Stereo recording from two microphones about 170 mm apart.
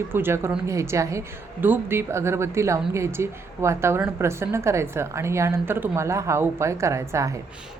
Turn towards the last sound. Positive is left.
turn(degrees=-20)  # may be behind; listen again after turning